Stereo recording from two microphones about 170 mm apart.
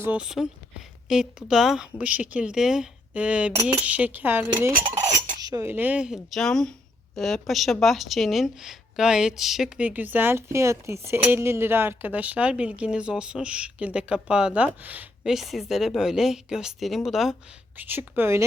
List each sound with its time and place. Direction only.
0.0 s a woman's voice: 5° right (ahead or behind)
4.9 s cutlery: 20° right (ahead or behind)
5.4 s a woman's voice: 20° right (ahead or behind)